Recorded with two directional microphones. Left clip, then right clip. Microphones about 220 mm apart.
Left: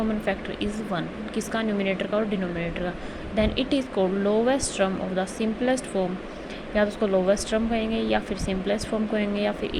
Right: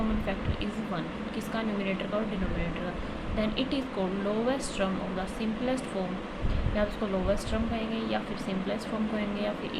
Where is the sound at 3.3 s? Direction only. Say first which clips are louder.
Left 7 dB; 30° left (ahead or behind).